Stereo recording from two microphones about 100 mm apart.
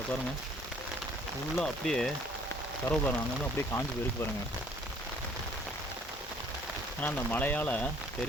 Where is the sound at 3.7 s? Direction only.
25° left (ahead or behind).